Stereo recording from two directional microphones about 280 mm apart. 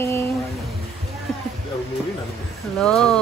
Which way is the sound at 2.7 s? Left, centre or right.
Centre.